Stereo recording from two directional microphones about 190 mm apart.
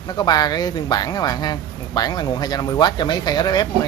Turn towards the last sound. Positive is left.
turn(degrees=20)  # may be behind; listen again after turning